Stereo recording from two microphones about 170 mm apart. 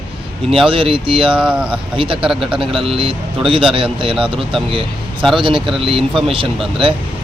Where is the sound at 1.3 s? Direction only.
5° right (ahead or behind).